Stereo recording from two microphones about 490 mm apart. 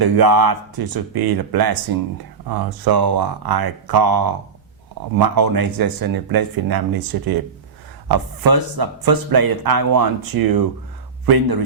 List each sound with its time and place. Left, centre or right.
0.0 s speech: right